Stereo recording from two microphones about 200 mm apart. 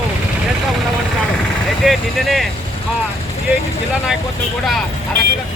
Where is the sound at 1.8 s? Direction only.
Centre (ahead or behind).